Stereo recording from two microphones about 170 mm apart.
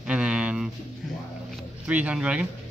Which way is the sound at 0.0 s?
5° right (ahead or behind).